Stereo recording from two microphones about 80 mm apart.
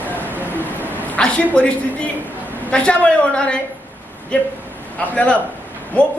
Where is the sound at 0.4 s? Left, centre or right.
Left.